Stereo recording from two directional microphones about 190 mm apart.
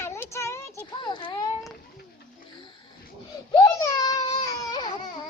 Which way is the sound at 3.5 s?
20° left (ahead or behind).